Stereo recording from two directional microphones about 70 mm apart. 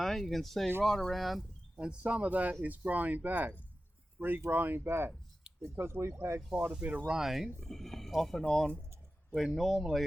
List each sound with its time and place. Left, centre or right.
0.0 s speech: centre
1.7 s speech: centre; by 6.1 s right
6.6 s speech: right
7.1 s speech: centre